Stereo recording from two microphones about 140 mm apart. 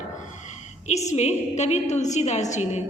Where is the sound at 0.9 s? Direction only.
55° left (ahead or behind).